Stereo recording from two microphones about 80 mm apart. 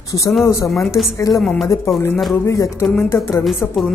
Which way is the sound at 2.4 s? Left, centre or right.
Left.